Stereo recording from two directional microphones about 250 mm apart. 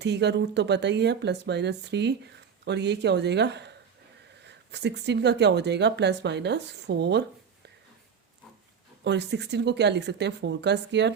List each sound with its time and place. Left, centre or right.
0.0 s speech: right
9.0 s speech: right